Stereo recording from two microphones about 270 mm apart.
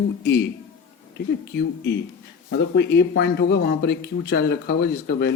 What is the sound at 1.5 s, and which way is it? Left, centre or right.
Speech, left.